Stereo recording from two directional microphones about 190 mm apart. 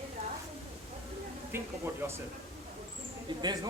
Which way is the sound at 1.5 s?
10° right (ahead or behind).